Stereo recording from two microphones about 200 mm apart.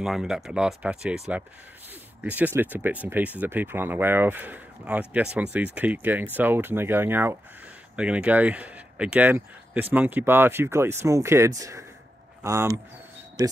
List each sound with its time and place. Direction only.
0.0 s speech: 5° right (ahead or behind)